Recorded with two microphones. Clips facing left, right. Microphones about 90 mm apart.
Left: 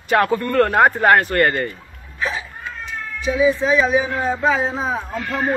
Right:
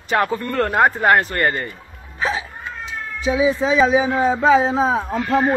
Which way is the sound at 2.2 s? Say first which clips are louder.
Right 2 dB; 90° right.